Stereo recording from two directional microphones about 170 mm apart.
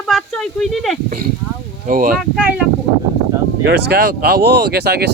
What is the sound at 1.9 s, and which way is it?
Speech, 55° right (ahead or behind).